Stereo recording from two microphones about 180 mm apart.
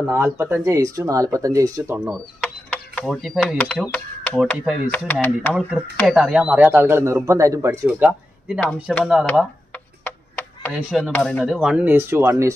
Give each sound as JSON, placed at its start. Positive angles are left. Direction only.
{"t": 0.0, "sound": "speech", "side_deg": -10}
{"t": 2.0, "sound": "speech", "side_deg": 0}
{"t": 3.9, "sound": "typing", "side_deg": 10}
{"t": 4.9, "sound": "speech", "side_deg": 10}
{"t": 5.5, "sound": "speech", "side_deg": -10}
{"t": 8.1, "sound": "speech", "side_deg": 5}
{"t": 8.9, "sound": "a sound", "side_deg": 0}
{"t": 10.7, "sound": "speech", "side_deg": -5}
{"t": 11.0, "sound": "speech", "side_deg": 5}